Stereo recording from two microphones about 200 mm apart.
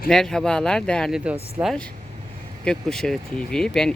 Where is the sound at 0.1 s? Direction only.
5° left (ahead or behind).